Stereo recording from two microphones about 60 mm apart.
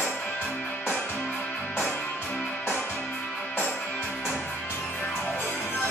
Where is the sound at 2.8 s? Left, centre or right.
Centre.